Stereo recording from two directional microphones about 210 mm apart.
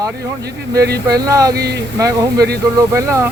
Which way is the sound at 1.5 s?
50° right (ahead or behind).